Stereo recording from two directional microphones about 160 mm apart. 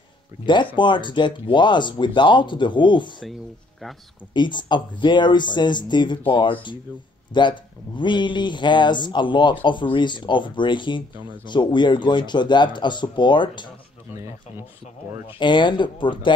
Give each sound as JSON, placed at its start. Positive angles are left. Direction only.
{"t": 0.5, "sound": "speech", "side_deg": 30}
{"t": 4.3, "sound": "speech", "side_deg": 30}
{"t": 15.2, "sound": "speech", "side_deg": 30}